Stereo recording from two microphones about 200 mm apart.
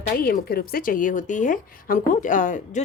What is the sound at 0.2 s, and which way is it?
A woman's voice, 50° left (ahead or behind).